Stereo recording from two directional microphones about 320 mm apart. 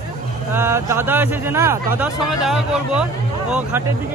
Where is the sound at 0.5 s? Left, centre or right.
Centre.